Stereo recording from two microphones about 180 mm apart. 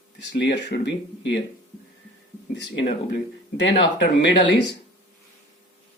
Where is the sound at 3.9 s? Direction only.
75° left (ahead or behind).